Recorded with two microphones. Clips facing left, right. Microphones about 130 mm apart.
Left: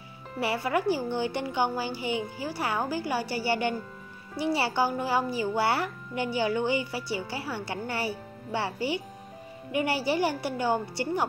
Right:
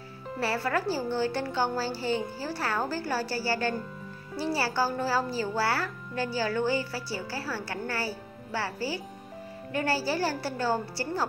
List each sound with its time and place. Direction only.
0.4 s a woman's voice: 15° left (ahead or behind)